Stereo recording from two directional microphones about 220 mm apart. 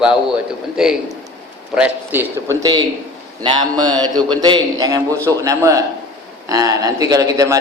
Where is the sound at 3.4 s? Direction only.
20° right (ahead or behind).